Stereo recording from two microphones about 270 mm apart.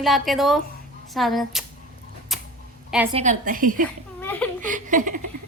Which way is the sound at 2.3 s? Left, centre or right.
Centre.